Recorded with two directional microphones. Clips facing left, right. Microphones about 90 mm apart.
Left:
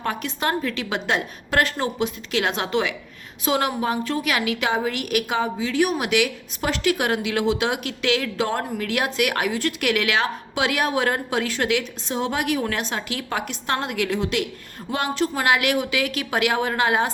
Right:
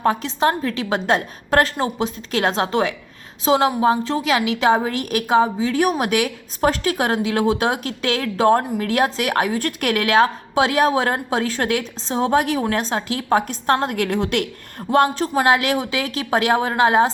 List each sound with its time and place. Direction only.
0.0 s a woman's voice: 30° right (ahead or behind)
4.7 s a woman's voice: 40° right (ahead or behind); by 14.4 s 55° right (ahead or behind)
14.8 s a woman's voice: 40° right (ahead or behind)